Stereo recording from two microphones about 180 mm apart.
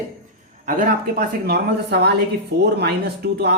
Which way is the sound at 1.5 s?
65° right (ahead or behind).